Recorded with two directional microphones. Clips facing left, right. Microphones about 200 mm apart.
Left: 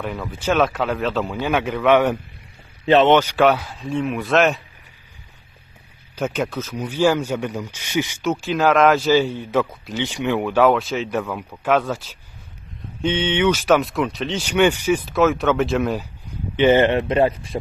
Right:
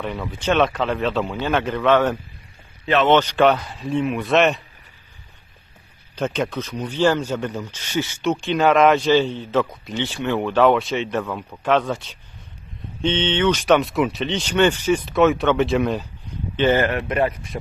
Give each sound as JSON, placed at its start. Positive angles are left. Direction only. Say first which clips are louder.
{"t": 0.0, "sound": "speech", "louder": "even", "side_deg": 0}
{"t": 6.1, "sound": "speech", "louder": "even", "side_deg": 5}
{"t": 8.2, "sound": "speech", "louder": "right 2 dB", "side_deg": 0}
{"t": 10.0, "sound": "speech", "louder": "left 1 dB", "side_deg": 15}
{"t": 16.5, "sound": "speech", "louder": "left 4 dB", "side_deg": 20}